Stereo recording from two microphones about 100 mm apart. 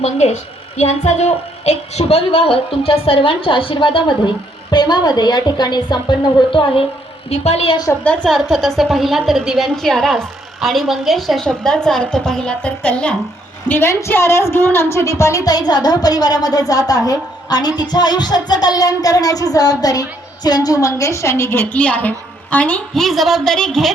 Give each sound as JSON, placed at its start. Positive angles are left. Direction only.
{"t": 0.0, "sound": "a woman's voice", "side_deg": 90}
{"t": 7.3, "sound": "a woman's voice", "side_deg": 90}
{"t": 8.0, "sound": "a woman's voice", "side_deg": 15}
{"t": 8.3, "sound": "a woman's voice", "side_deg": 0}
{"t": 13.7, "sound": "music", "side_deg": 25}
{"t": 17.1, "sound": "a woman's voice", "side_deg": 40}
{"t": 17.9, "sound": "music", "side_deg": 45}
{"t": 23.0, "sound": "a woman's voice", "side_deg": 0}